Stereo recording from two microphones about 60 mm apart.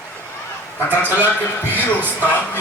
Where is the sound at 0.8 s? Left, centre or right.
Left.